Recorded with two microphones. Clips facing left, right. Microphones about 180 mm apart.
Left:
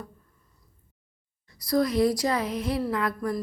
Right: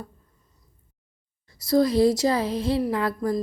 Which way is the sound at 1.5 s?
25° right (ahead or behind).